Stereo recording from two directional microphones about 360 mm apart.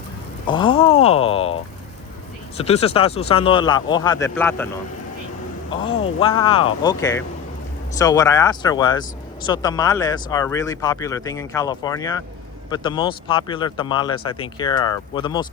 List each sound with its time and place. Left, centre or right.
0.4 s a sound: centre
2.6 s speech: centre
5.7 s speech: centre